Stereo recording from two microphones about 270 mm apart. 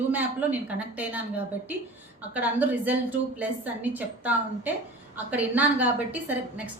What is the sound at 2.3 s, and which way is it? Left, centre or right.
A woman's voice, centre.